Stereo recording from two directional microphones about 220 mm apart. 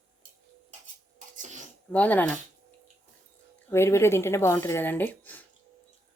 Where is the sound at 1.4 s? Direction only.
35° right (ahead or behind).